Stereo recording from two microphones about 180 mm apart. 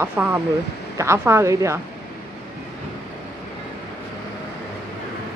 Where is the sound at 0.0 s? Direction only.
10° right (ahead or behind).